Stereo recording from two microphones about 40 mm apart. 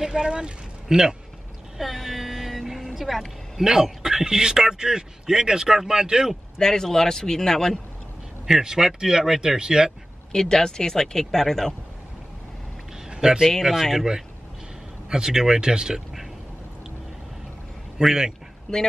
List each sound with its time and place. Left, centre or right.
0.0 s a man's voice: centre
1.8 s vehicle: centre
3.5 s a man's voice: centre
6.6 s speech: centre
8.5 s a man's voice: centre
10.3 s speech: centre
13.1 s a sound: right
13.9 s a man's voice: centre
17.9 s a man's voice: centre
18.7 s speech: centre